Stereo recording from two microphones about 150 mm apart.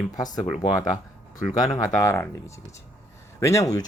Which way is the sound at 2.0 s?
15° left (ahead or behind).